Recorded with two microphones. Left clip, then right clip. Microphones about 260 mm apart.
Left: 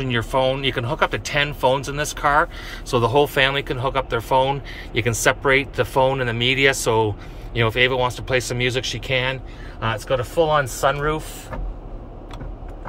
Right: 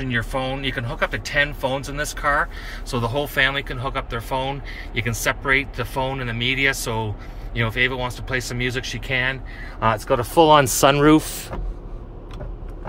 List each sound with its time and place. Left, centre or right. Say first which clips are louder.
0.0 s speech: left 4 dB; centre
9.8 s a man's voice: right 3 dB; centre
10.3 s speech: right 6 dB; right